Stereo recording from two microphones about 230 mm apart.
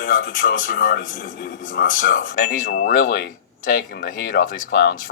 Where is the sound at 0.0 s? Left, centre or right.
Left.